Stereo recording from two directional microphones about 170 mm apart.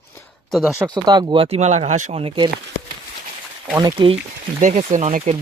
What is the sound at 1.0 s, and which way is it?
Speech, 25° right (ahead or behind).